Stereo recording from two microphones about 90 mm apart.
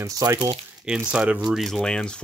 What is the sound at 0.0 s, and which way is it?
Speech, 35° right (ahead or behind).